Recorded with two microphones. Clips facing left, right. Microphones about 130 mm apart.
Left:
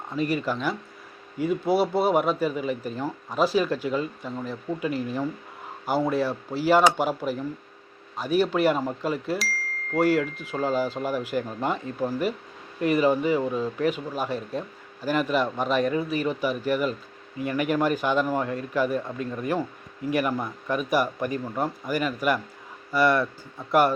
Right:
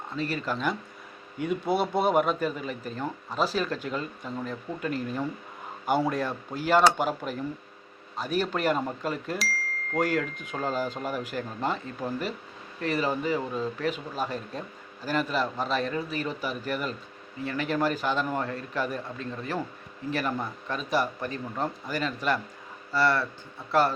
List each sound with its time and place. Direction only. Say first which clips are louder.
0.2 s speech: left 4 dB; 10° left (ahead or behind)